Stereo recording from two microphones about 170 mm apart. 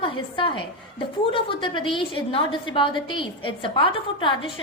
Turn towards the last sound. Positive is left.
turn(degrees=30)  # may be behind; listen again after turning